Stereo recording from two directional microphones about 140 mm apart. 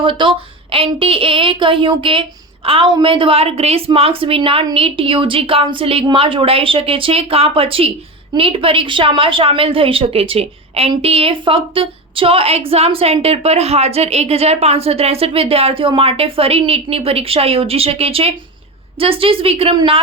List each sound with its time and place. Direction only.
0.0 s a woman's voice: 35° right (ahead or behind)